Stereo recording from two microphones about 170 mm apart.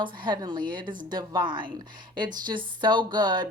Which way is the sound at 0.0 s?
25° right (ahead or behind).